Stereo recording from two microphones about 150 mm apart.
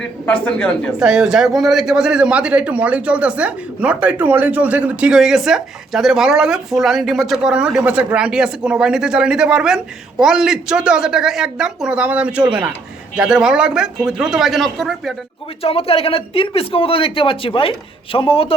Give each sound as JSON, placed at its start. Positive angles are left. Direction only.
{"t": 0.3, "sound": "speech", "side_deg": 10}
{"t": 0.9, "sound": "a man's voice", "side_deg": -5}
{"t": 15.6, "sound": "speech", "side_deg": 40}